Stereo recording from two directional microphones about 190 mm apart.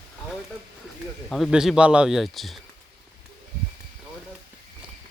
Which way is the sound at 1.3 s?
Centre (ahead or behind).